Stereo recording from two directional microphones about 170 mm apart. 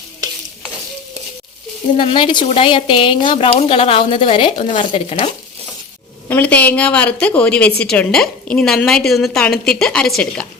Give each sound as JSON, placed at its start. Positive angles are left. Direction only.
{"t": 2.0, "sound": "a woman's voice", "side_deg": 30}
{"t": 4.8, "sound": "stir", "side_deg": 35}
{"t": 6.2, "sound": "a woman's voice", "side_deg": 10}